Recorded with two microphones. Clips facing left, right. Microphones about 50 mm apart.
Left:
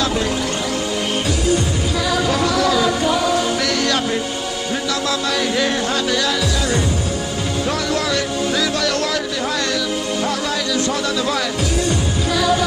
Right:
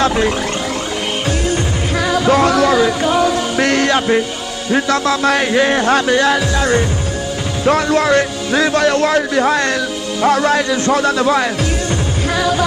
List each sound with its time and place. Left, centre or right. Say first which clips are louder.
0.0 s a sound: right 5 dB; right
2.0 s music: right 7 dB; right
3.5 s a man's voice: right 5 dB; right